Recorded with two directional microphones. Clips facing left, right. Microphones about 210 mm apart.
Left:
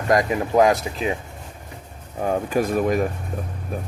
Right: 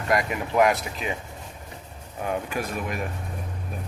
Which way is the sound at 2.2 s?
35° left (ahead or behind).